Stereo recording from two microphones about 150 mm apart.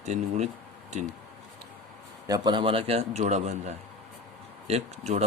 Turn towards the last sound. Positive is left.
turn(degrees=-45)  # may be behind; listen again after turning